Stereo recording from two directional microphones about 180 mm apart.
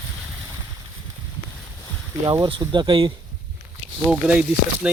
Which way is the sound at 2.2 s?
25° right (ahead or behind).